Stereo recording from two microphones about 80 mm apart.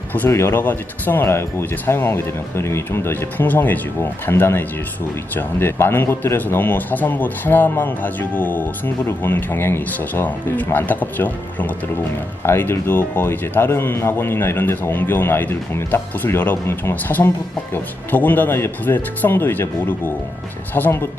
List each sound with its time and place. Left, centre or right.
0.1 s speech: left
20.7 s speech: left